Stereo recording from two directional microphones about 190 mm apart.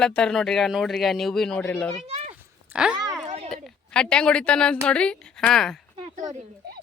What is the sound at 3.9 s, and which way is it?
Speech, 5° left (ahead or behind).